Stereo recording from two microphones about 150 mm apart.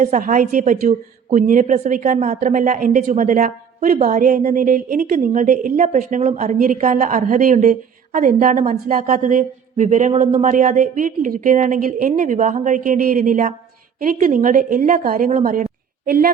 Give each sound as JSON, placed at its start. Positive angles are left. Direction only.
{"t": 0.0, "sound": "speech", "side_deg": -55}
{"t": 15.3, "sound": "speech", "side_deg": -60}